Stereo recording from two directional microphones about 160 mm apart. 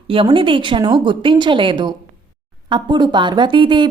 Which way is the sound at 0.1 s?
35° right (ahead or behind).